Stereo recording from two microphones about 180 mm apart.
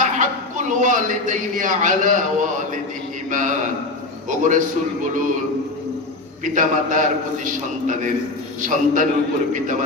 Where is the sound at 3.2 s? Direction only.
45° right (ahead or behind).